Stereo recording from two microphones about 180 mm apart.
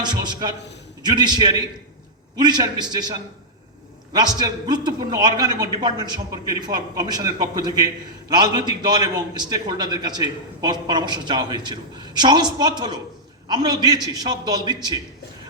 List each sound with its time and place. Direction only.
0.0 s a man's voice: 25° right (ahead or behind)
4.1 s a man's voice: 25° right (ahead or behind)